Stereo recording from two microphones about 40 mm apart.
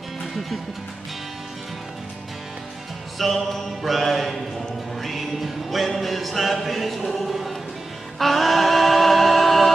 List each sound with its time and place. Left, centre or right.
3.2 s mantra: centre
5.0 s music: centre